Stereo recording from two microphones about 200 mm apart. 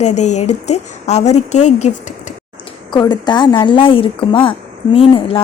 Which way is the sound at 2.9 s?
20° left (ahead or behind).